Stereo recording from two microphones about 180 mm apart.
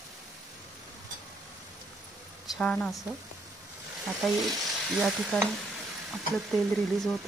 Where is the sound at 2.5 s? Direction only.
5° left (ahead or behind).